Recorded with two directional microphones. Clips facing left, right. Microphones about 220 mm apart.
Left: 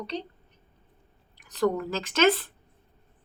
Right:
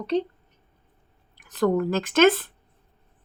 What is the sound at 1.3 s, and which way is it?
Speech, 55° right (ahead or behind).